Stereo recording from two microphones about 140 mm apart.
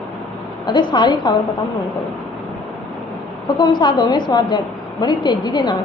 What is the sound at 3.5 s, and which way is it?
A woman's voice, 35° left (ahead or behind).